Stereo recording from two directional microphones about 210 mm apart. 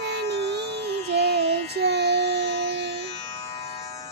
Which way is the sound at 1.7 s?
50° right (ahead or behind).